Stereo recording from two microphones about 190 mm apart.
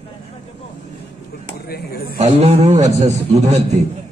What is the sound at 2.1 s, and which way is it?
A man's voice, 35° right (ahead or behind).